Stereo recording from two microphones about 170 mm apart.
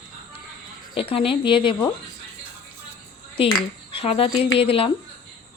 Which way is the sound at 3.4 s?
30° left (ahead or behind).